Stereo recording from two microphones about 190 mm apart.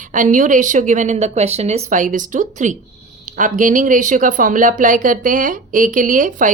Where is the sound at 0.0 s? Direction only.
45° right (ahead or behind).